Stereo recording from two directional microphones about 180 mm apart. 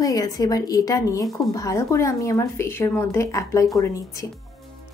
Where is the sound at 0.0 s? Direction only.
20° left (ahead or behind).